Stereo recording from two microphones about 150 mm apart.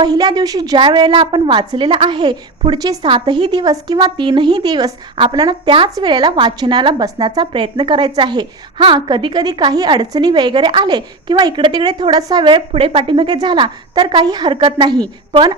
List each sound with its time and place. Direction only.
0.0 s a woman's voice: 25° right (ahead or behind)